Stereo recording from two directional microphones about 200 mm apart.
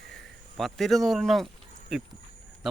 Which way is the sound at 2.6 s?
5° right (ahead or behind).